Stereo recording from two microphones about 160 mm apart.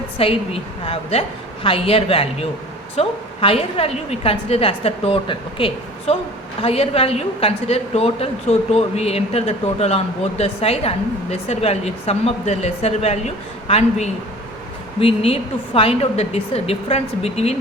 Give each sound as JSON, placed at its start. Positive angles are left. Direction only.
{"t": 0.2, "sound": "speech", "side_deg": 35}